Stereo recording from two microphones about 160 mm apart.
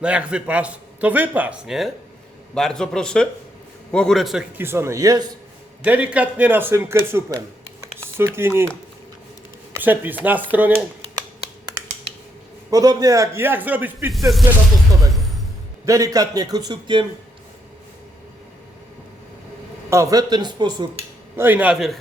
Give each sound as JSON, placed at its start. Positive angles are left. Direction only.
{"t": 0.0, "sound": "a man's voice", "side_deg": -5}
{"t": 4.5, "sound": "a man's voice", "side_deg": -15}
{"t": 5.8, "sound": "a man's voice", "side_deg": -10}
{"t": 7.8, "sound": "typing", "side_deg": -15}
{"t": 9.7, "sound": "a man's voice", "side_deg": -10}
{"t": 12.7, "sound": "a man's voice", "side_deg": -25}
{"t": 15.9, "sound": "a man's voice", "side_deg": -20}
{"t": 19.9, "sound": "a man's voice", "side_deg": -20}
{"t": 21.3, "sound": "a man's voice", "side_deg": -10}